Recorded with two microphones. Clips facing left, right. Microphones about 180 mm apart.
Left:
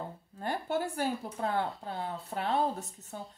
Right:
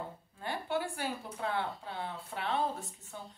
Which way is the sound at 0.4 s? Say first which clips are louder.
Left 3 dB; 45° left (ahead or behind).